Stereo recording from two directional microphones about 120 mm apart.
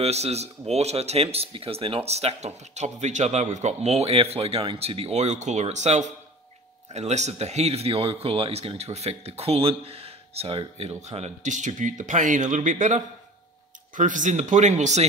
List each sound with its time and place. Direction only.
0.0 s speech: 60° right (ahead or behind)